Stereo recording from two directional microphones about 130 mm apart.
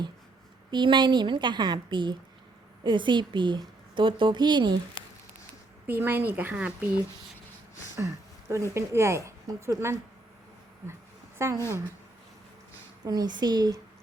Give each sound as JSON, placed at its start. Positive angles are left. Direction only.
{"t": 0.7, "sound": "a woman's voice", "side_deg": -35}
{"t": 5.8, "sound": "speech", "side_deg": -15}
{"t": 7.9, "sound": "a sound", "side_deg": -25}
{"t": 8.7, "sound": "speech", "side_deg": -20}
{"t": 11.3, "sound": "a woman's voice", "side_deg": -20}
{"t": 13.1, "sound": "a woman's voice", "side_deg": -30}